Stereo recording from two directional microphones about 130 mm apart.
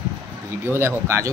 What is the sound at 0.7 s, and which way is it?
Speech, 20° right (ahead or behind).